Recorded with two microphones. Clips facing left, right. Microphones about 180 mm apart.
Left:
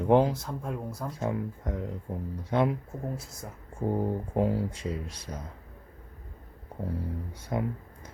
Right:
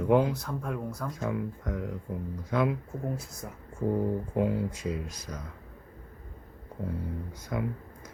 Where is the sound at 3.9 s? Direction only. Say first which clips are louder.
Even; 30° left (ahead or behind).